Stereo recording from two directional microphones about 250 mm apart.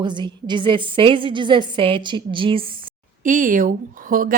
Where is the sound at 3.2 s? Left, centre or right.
Right.